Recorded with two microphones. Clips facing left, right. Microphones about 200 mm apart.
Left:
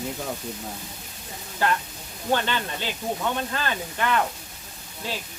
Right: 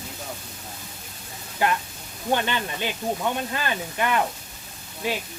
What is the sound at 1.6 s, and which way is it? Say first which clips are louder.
Speech: right 1 dB; 15° right (ahead or behind).